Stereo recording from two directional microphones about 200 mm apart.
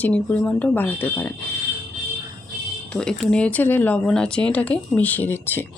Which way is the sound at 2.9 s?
5° left (ahead or behind).